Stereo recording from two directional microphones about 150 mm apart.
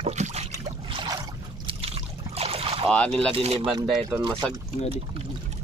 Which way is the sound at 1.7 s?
40° right (ahead or behind).